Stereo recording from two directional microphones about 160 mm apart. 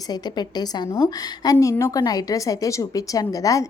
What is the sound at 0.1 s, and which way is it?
A woman's voice, 25° left (ahead or behind).